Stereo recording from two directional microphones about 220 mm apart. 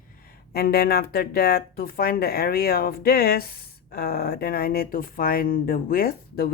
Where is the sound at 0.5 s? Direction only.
45° left (ahead or behind).